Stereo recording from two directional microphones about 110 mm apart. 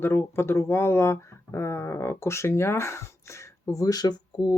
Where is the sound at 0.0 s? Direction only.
20° left (ahead or behind).